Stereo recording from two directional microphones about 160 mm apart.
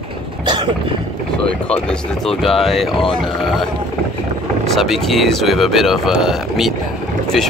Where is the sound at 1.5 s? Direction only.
5° left (ahead or behind).